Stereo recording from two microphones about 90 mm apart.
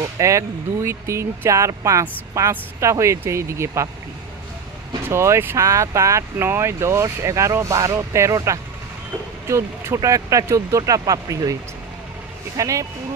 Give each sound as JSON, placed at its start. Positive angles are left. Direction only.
{"t": 0.0, "sound": "speech", "side_deg": -35}
{"t": 5.1, "sound": "speech", "side_deg": -30}
{"t": 12.5, "sound": "speech", "side_deg": -40}